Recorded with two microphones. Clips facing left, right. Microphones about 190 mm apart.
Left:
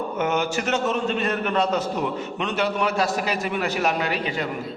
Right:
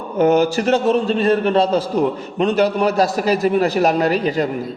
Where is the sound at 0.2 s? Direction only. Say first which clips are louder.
Right 11 dB; 35° right (ahead or behind).